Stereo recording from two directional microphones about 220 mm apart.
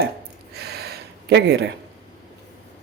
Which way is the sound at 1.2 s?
50° right (ahead or behind).